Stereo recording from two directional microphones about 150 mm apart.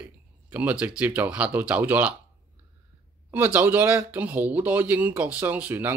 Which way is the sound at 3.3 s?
15° right (ahead or behind).